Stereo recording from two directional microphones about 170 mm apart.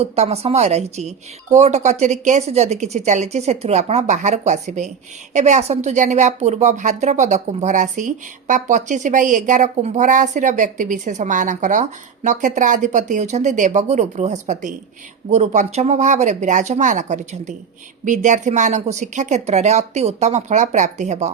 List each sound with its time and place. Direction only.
0.0 s a woman's voice: 40° right (ahead or behind)